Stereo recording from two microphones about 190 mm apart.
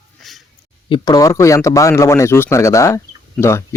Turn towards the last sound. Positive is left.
turn(degrees=15)  # may be behind; listen again after turning